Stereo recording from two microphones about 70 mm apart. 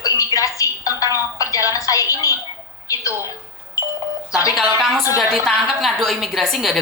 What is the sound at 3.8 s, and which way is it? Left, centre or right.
Doorbell, left.